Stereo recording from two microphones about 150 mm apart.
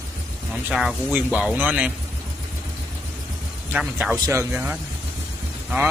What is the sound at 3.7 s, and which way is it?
Speech, 10° right (ahead or behind).